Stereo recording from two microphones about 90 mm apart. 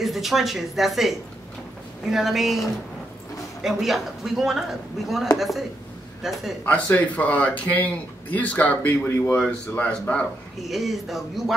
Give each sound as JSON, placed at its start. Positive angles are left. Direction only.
{"t": 0.0, "sound": "speech", "side_deg": 0}
{"t": 6.6, "sound": "a man's voice", "side_deg": 15}
{"t": 10.6, "sound": "speech", "side_deg": 0}